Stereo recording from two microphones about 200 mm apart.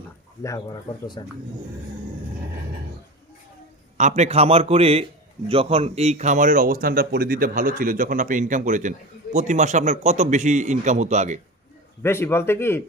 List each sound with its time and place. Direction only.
0.4 s speech: 15° left (ahead or behind)
3.9 s speech: 35° right (ahead or behind)
12.0 s speech: 10° left (ahead or behind)